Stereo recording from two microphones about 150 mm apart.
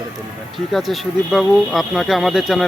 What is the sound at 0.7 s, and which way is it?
Speech, centre (ahead or behind).